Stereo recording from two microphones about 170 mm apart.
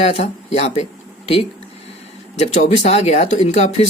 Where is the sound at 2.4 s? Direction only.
40° left (ahead or behind).